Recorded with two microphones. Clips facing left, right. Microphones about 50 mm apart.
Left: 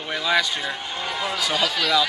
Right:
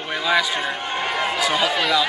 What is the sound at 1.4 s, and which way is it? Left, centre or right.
Speech, right.